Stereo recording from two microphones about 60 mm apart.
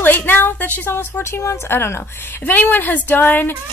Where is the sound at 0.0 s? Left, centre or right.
Left.